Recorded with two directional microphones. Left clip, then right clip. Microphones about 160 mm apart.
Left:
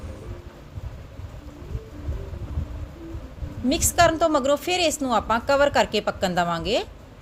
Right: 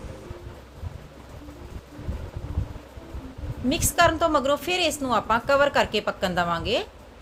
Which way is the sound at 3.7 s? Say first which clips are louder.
Left 1 dB; 40° left (ahead or behind).